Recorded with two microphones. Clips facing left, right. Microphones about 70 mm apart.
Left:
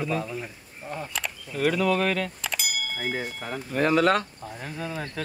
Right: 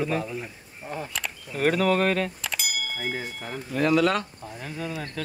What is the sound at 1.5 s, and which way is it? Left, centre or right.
Speech, right.